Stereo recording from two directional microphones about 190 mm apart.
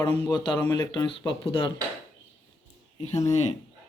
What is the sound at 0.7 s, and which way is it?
Speech, 20° left (ahead or behind).